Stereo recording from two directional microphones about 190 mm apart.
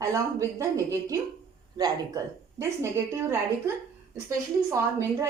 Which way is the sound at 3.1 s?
15° right (ahead or behind).